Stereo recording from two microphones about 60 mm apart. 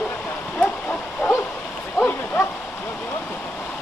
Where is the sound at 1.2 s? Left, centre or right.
Left.